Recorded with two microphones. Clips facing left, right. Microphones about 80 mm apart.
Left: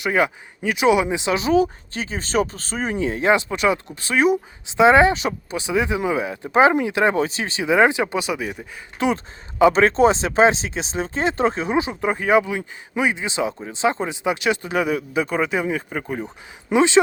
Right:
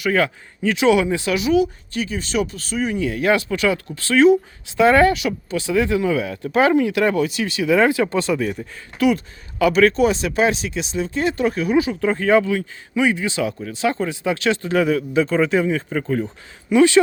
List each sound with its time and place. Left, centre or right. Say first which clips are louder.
0.0 s speech: right 1 dB; centre
1.4 s speech: even; left; by 8.6 s centre
9.0 s speech: right 3 dB; left